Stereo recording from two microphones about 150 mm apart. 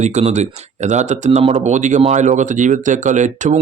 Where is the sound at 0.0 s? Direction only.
45° right (ahead or behind).